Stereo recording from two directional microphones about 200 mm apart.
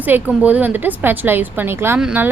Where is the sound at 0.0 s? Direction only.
10° right (ahead or behind).